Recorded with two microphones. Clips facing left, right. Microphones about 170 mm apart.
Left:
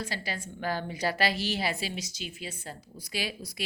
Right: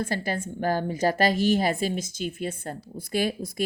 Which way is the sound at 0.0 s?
50° right (ahead or behind).